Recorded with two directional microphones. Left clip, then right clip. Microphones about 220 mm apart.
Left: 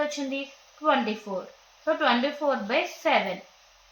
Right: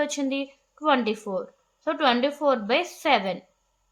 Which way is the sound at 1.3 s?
50° right (ahead or behind).